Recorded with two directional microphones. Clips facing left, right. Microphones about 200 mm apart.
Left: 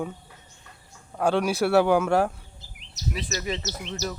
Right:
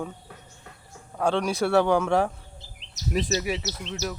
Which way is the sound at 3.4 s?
10° right (ahead or behind).